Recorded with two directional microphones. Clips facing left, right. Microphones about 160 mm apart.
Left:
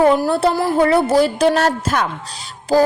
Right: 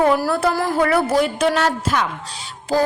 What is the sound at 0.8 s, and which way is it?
A woman's voice, 25° left (ahead or behind).